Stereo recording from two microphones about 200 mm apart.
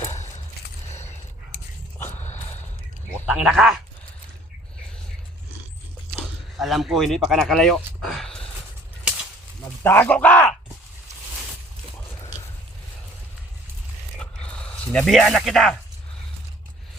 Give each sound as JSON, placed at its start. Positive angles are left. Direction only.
{"t": 2.0, "sound": "a sound", "side_deg": 35}
{"t": 3.2, "sound": "speech", "side_deg": -5}
{"t": 6.1, "sound": "speech", "side_deg": 0}
{"t": 9.8, "sound": "speech", "side_deg": 10}
{"t": 14.9, "sound": "speech", "side_deg": 0}